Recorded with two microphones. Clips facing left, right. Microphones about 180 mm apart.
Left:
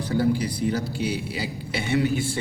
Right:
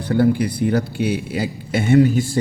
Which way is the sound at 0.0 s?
60° right (ahead or behind).